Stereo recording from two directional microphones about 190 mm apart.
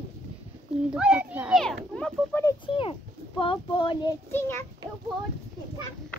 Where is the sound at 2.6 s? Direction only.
30° left (ahead or behind).